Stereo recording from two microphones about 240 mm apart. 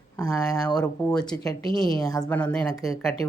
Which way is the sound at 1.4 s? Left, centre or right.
Centre.